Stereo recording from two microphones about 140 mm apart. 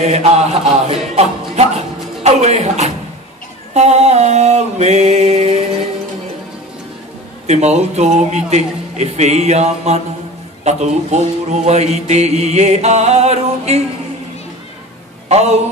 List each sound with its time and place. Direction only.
0.0 s mantra: 50° right (ahead or behind)
7.4 s mantra: 55° right (ahead or behind)
15.2 s speech: 50° right (ahead or behind)